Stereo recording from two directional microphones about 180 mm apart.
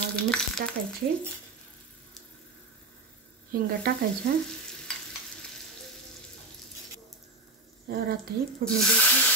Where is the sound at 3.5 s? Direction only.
55° right (ahead or behind).